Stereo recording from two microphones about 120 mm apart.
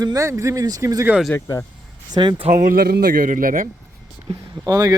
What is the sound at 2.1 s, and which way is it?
Speech, 40° right (ahead or behind).